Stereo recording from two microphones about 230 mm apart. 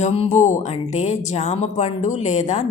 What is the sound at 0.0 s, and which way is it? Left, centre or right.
A woman's voice, left.